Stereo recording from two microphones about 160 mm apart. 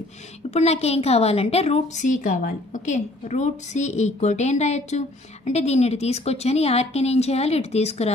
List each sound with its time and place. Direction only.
0.5 s a woman's voice: 40° left (ahead or behind)